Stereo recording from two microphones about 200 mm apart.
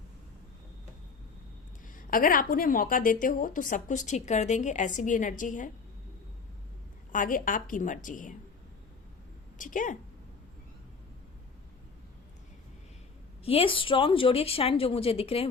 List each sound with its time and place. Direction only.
1.9 s a woman's voice: 45° left (ahead or behind)
7.1 s a woman's voice: 40° left (ahead or behind)
9.6 s a woman's voice: 40° left (ahead or behind)
13.4 s a woman's voice: 30° left (ahead or behind)